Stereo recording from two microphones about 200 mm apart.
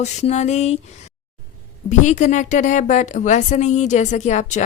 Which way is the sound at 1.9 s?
35° left (ahead or behind).